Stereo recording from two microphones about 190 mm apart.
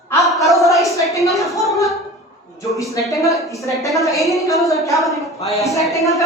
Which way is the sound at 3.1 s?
15° left (ahead or behind).